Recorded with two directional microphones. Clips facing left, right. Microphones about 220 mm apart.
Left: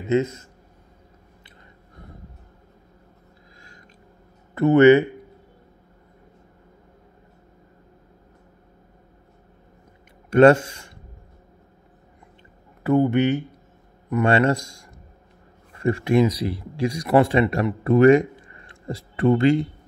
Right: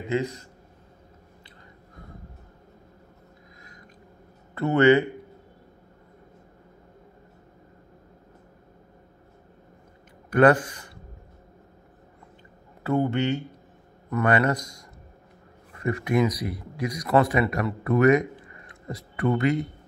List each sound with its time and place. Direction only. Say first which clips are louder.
0.1 s speech: left 6 dB; 20° left (ahead or behind)
4.6 s speech: left 5 dB; 20° left (ahead or behind)
10.3 s speech: left 5 dB; 25° left (ahead or behind)
12.8 s speech: left 5 dB; 15° left (ahead or behind)